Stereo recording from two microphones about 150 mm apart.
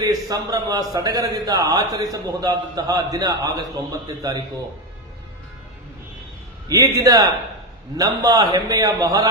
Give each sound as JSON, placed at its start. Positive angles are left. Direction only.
{"t": 0.0, "sound": "a man's voice", "side_deg": -25}
{"t": 6.7, "sound": "a man's voice", "side_deg": -25}